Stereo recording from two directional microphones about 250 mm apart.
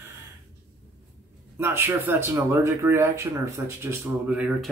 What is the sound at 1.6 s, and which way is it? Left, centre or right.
Speech, centre.